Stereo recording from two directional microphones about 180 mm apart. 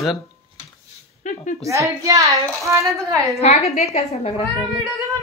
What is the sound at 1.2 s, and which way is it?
Speech, 45° left (ahead or behind).